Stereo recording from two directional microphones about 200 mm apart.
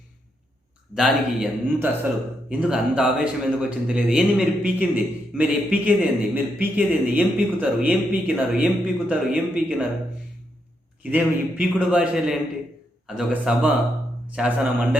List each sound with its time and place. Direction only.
0.9 s a man's voice: centre (ahead or behind)
11.0 s a man's voice: 10° right (ahead or behind)